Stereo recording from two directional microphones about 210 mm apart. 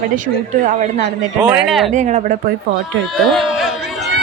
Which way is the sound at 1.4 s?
5° right (ahead or behind).